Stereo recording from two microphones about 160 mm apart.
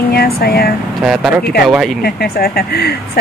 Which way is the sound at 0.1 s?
75° left (ahead or behind).